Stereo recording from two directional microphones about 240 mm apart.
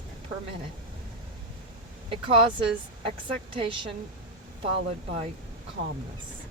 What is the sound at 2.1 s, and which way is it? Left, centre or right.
Speech, right.